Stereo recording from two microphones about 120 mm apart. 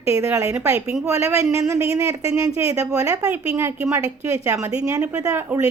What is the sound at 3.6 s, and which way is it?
A woman's voice, 20° right (ahead or behind).